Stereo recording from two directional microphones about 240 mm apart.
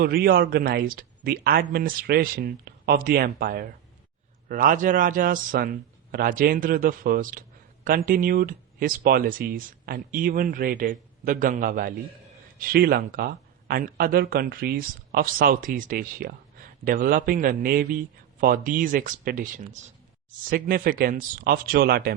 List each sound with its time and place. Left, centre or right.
0.0 s a man's voice: right